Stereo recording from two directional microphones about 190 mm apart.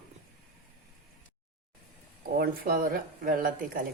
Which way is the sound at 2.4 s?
50° right (ahead or behind).